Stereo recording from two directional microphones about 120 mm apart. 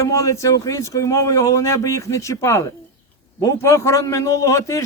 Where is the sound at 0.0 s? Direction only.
25° left (ahead or behind).